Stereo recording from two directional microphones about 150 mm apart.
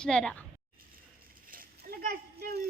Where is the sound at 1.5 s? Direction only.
75° right (ahead or behind).